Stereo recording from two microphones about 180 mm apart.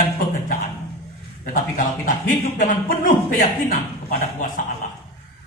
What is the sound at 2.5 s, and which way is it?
A man's voice, 50° left (ahead or behind).